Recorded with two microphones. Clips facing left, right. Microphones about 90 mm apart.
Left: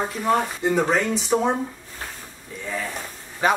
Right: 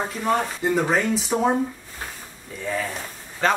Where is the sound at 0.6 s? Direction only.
Centre (ahead or behind).